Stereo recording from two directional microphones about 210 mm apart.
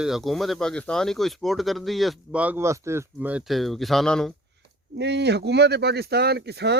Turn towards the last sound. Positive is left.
turn(degrees=-50)  # may be behind; listen again after turning